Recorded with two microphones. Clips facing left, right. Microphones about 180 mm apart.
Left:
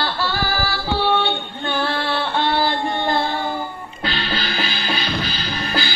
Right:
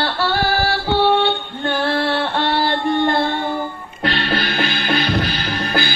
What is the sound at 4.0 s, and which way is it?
Music, 65° right (ahead or behind).